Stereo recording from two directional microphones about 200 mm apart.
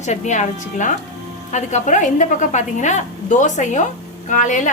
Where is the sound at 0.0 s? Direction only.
35° left (ahead or behind).